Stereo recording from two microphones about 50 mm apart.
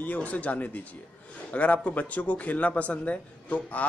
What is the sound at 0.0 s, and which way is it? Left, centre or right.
A man's voice, left.